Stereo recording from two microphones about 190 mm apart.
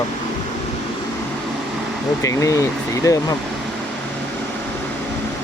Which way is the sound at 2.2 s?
15° left (ahead or behind).